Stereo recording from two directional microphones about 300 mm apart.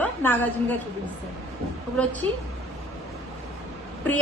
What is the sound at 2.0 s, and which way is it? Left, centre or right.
Speech, centre.